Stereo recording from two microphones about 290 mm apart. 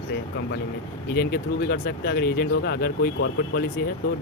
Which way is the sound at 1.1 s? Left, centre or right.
Left.